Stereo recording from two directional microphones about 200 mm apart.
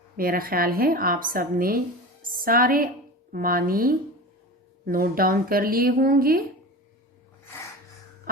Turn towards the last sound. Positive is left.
turn(degrees=-45)  # may be behind; listen again after turning